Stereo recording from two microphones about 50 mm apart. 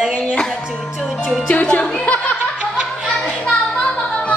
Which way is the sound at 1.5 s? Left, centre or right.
Left.